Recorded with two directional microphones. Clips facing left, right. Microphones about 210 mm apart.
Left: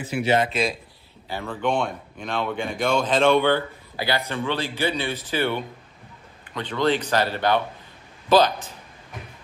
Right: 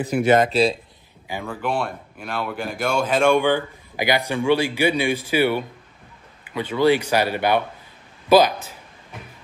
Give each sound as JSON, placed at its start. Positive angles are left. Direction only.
{"t": 0.0, "sound": "speech", "side_deg": -45}
{"t": 0.5, "sound": "speech", "side_deg": -35}
{"t": 1.5, "sound": "speech", "side_deg": -5}